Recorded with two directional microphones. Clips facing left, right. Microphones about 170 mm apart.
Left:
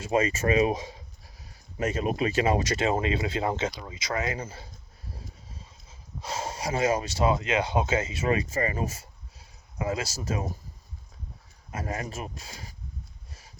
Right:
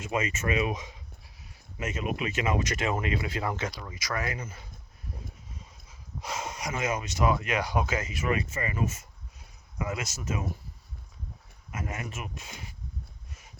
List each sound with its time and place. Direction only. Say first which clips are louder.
0.0 s speech: left 5 dB; 35° left (ahead or behind)
11.7 s speech: left 3 dB; 35° left (ahead or behind)